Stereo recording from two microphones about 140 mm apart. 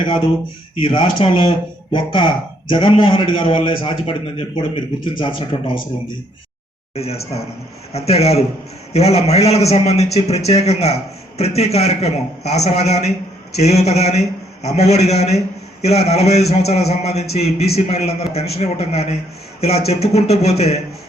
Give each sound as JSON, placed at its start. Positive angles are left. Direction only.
{"t": 0.0, "sound": "speech", "side_deg": 35}
{"t": 6.9, "sound": "a man's voice", "side_deg": 45}